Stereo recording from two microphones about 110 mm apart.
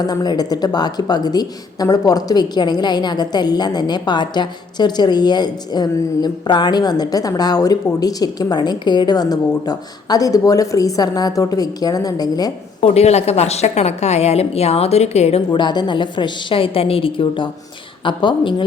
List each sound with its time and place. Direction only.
0.0 s speech: 35° left (ahead or behind)
12.8 s a woman's voice: 75° left (ahead or behind)
15.5 s a woman's voice: 45° left (ahead or behind)